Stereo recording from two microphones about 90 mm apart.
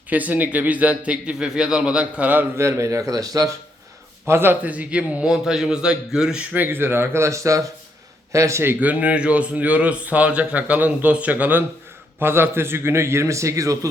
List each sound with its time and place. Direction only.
0.1 s a man's voice: 20° right (ahead or behind)
2.6 s speech: 30° right (ahead or behind)
4.3 s a man's voice: 25° right (ahead or behind); by 6.6 s 10° right (ahead or behind)
6.6 s a man's voice: 25° right (ahead or behind)
8.8 s a man's voice: 15° right (ahead or behind); by 13.7 s 35° right (ahead or behind)